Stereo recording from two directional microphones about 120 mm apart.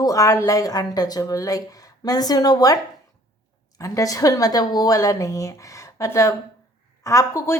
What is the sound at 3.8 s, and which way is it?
A woman's voice, 30° left (ahead or behind).